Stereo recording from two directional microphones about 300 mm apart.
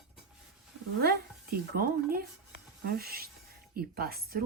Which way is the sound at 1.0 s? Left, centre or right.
Right.